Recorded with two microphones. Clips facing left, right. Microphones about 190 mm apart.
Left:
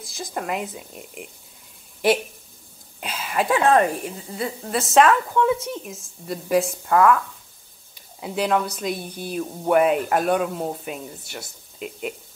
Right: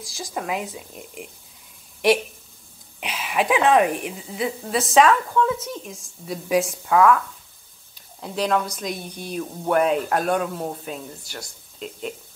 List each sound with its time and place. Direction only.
0.0 s speech: centre (ahead or behind)
3.1 s speech: centre (ahead or behind)
5.3 s speech: 10° left (ahead or behind)
6.2 s speech: centre (ahead or behind)
8.2 s speech: 5° left (ahead or behind)